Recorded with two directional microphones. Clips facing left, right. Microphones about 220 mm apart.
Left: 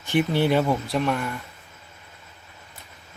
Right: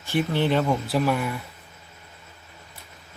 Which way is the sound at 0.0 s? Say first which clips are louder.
Left 2 dB; 15° left (ahead or behind).